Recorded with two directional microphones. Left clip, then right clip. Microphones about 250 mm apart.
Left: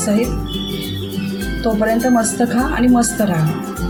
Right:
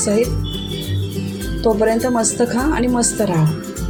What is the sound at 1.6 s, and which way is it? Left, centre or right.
A woman's voice, right.